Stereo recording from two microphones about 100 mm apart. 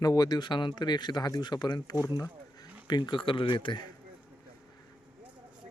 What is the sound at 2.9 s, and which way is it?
Speech, 50° left (ahead or behind).